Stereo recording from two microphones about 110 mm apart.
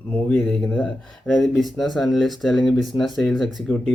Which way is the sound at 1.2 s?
Centre (ahead or behind).